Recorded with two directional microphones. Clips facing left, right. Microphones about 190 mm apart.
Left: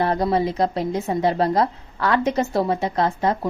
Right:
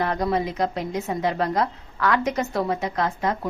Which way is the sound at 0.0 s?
30° left (ahead or behind).